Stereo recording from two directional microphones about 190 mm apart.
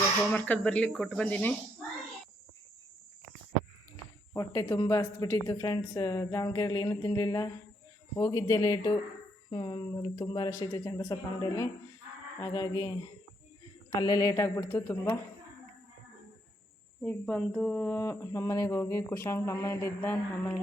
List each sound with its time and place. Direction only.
0.3 s speech: 10° left (ahead or behind)
4.4 s speech: 15° left (ahead or behind)
14.0 s speech: 20° left (ahead or behind)
17.0 s speech: 5° left (ahead or behind)